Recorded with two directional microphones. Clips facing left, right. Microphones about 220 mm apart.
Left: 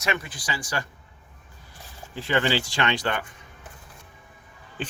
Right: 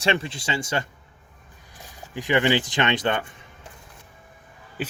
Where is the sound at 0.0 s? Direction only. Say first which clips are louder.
Right 5 dB; 30° right (ahead or behind).